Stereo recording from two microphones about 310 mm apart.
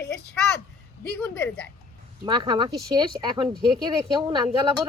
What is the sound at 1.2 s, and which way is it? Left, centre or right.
Speech, centre.